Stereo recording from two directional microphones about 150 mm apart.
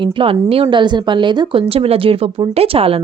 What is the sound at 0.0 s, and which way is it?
A woman's voice, 35° right (ahead or behind).